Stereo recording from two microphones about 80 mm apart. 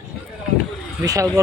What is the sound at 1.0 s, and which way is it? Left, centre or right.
Speech, right.